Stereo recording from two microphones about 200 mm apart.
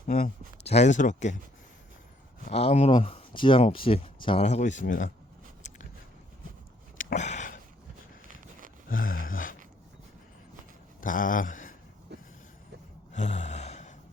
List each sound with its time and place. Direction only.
0.2 s speech: 30° left (ahead or behind)
2.5 s speech: 30° left (ahead or behind)
7.0 s a sound: 35° left (ahead or behind)
8.9 s a sound: 45° left (ahead or behind)
11.0 s speech: 40° left (ahead or behind)
13.1 s gasp: 35° left (ahead or behind)